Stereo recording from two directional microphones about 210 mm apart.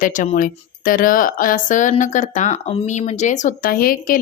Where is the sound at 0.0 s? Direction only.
40° left (ahead or behind).